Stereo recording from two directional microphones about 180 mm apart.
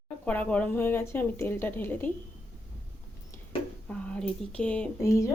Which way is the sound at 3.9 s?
5° left (ahead or behind).